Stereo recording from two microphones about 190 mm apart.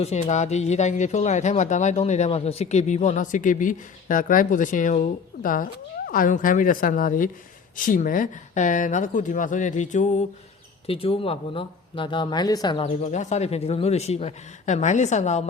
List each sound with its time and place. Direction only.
0.0 s speech: 35° left (ahead or behind)
10.8 s speech: 30° left (ahead or behind)